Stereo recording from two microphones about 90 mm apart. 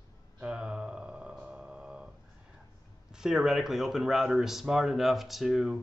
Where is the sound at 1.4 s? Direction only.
10° right (ahead or behind).